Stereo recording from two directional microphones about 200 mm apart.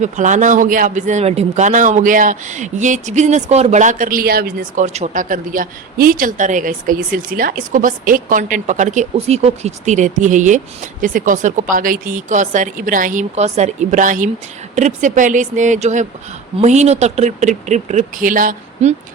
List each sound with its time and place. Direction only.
0.0 s speech: 40° right (ahead or behind)